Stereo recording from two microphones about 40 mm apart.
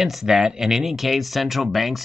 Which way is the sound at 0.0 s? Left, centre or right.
Centre.